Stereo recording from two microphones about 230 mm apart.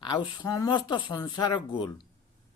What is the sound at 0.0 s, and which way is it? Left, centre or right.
Speech, centre.